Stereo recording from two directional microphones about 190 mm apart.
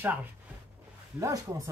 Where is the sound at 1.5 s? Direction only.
20° right (ahead or behind).